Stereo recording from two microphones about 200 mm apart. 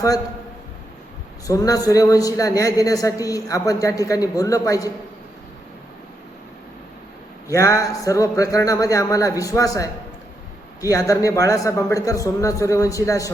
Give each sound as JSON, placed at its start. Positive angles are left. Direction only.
{"t": 1.5, "sound": "a man's voice", "side_deg": 15}
{"t": 7.4, "sound": "a man's voice", "side_deg": 15}